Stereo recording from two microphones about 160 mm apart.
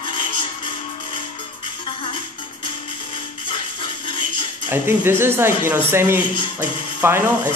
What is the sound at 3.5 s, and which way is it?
Music, 30° left (ahead or behind).